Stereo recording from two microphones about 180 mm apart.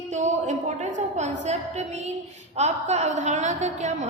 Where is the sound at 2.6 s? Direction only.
40° right (ahead or behind).